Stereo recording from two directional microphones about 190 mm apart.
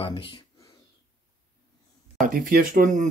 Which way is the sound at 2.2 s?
45° right (ahead or behind).